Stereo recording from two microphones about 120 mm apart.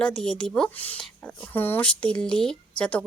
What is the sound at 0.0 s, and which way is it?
Speech, 10° left (ahead or behind).